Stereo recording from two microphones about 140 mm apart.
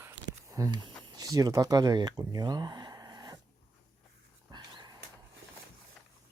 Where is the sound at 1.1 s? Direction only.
25° right (ahead or behind).